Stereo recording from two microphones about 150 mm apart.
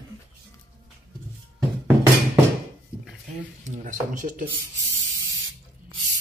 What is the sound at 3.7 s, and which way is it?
Speech, 60° right (ahead or behind).